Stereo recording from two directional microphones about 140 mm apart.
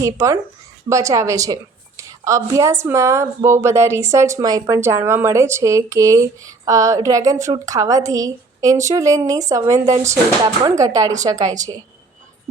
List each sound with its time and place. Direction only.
0.0 s a woman's voice: 20° right (ahead or behind)